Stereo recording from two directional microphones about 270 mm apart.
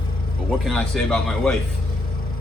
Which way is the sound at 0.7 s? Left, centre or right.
Centre.